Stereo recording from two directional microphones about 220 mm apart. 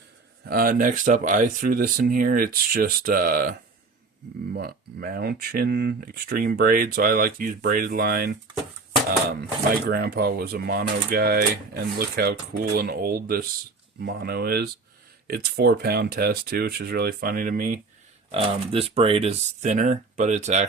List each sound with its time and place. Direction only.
0.4 s speech: 45° right (ahead or behind)
4.5 s speech: 45° right (ahead or behind)
9.8 s speech: 45° right (ahead or behind)
18.3 s speech: 25° right (ahead or behind)